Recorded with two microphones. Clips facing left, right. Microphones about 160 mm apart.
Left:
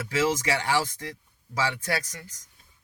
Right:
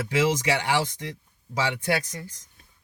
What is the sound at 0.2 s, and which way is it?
Speech, 15° right (ahead or behind).